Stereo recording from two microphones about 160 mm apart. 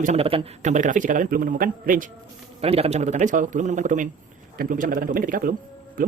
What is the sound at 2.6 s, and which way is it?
Speech, 40° right (ahead or behind).